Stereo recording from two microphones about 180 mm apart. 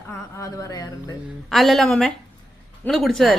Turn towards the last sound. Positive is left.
turn(degrees=0)  # may be behind; listen again after turning